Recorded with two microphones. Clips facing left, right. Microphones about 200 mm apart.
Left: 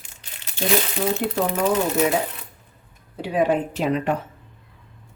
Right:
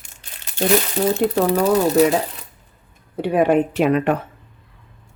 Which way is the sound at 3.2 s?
60° right (ahead or behind).